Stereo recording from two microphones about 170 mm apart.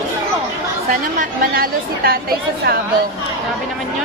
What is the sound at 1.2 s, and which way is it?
Speech, 60° right (ahead or behind).